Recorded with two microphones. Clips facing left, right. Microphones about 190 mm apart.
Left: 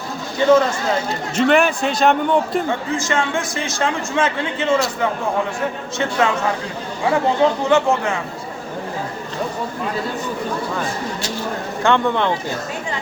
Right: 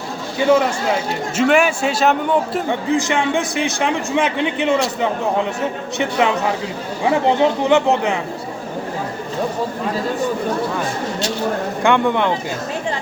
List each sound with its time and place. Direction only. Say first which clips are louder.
0.3 s a man's voice: left 1 dB; 10° right (ahead or behind)
2.9 s a man's voice: right 6 dB; 15° right (ahead or behind)
11.8 s a man's voice: right 1 dB; 15° right (ahead or behind)